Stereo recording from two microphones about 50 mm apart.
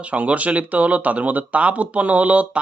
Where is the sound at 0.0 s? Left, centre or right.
Right.